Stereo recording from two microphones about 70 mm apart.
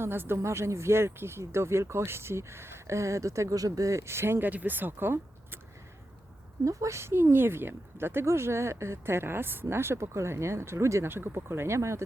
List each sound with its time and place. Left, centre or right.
0.0 s speech: right
6.7 s speech: right
11.1 s speech: right